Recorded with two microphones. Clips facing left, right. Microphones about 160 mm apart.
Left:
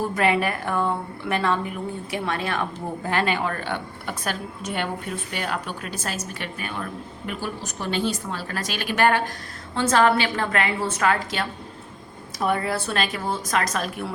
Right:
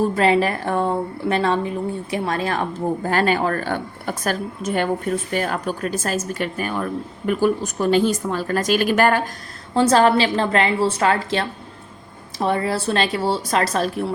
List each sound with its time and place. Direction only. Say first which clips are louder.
0.0 s a woman's voice: right 5 dB; 30° right (ahead or behind)
9.9 s a woman's voice: right 2 dB; 30° right (ahead or behind)